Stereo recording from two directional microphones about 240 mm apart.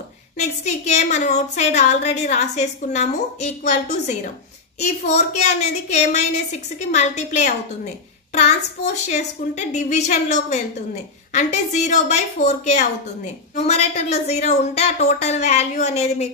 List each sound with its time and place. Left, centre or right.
0.4 s a woman's voice: left